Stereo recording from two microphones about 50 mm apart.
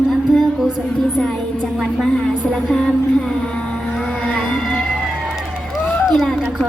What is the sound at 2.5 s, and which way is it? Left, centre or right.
Speech, centre.